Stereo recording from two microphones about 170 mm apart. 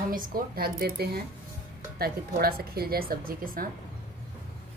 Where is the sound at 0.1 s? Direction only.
55° right (ahead or behind).